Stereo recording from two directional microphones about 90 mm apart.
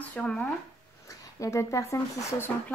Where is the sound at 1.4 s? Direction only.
35° left (ahead or behind).